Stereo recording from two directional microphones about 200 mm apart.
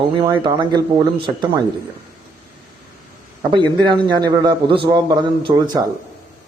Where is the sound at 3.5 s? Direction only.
25° right (ahead or behind).